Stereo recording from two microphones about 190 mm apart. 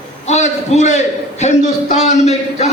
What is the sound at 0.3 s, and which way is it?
A man's voice, 35° left (ahead or behind).